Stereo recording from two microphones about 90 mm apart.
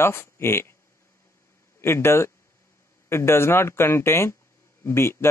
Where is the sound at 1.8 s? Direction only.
25° left (ahead or behind).